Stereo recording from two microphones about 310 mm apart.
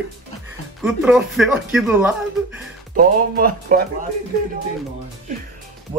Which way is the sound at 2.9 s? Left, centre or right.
Right.